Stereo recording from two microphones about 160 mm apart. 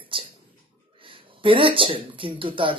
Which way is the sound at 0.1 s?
35° right (ahead or behind).